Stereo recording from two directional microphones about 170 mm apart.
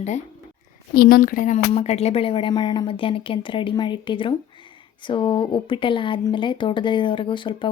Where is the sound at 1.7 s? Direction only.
40° left (ahead or behind).